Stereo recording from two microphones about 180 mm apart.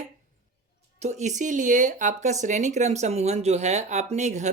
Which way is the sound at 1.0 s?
40° right (ahead or behind).